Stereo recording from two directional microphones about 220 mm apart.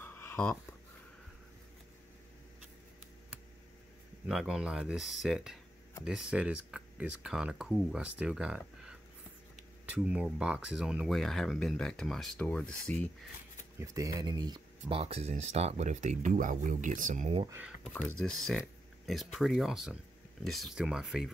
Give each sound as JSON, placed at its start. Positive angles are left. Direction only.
{"t": 0.0, "sound": "a sound", "side_deg": 10}
{"t": 4.3, "sound": "speech", "side_deg": -5}
{"t": 13.7, "sound": "speech", "side_deg": -15}
{"t": 17.9, "sound": "speech", "side_deg": 5}